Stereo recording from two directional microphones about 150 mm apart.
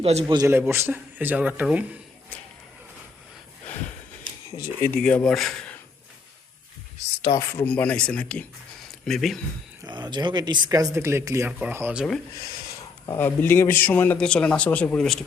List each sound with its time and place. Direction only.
0.0 s a man's voice: 45° right (ahead or behind)
0.3 s speech: 25° right (ahead or behind)
0.7 s speech: 15° right (ahead or behind)
4.9 s speech: 5° left (ahead or behind)
7.3 s a man's voice: 15° left (ahead or behind)
9.8 s speech: 30° right (ahead or behind); by 12.0 s 15° right (ahead or behind)
13.1 s a man's voice: 15° left (ahead or behind)